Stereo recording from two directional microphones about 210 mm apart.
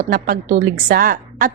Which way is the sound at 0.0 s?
40° right (ahead or behind).